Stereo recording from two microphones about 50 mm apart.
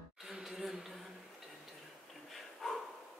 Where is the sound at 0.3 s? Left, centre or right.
Centre.